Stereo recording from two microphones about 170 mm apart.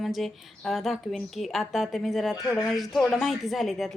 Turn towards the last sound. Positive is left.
turn(degrees=0)  # may be behind; listen again after turning